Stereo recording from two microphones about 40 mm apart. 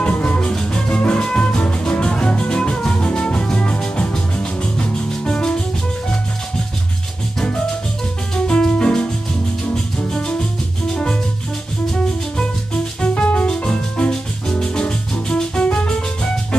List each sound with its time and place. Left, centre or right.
0.2 s music: left
8.4 s music: left
13.0 s music: left
13.7 s music: centre